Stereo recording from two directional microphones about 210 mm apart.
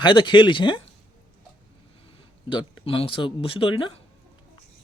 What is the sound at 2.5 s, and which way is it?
Speech, 20° left (ahead or behind).